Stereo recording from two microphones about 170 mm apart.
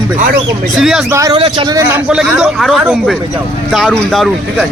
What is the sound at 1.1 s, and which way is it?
Speech, 20° right (ahead or behind).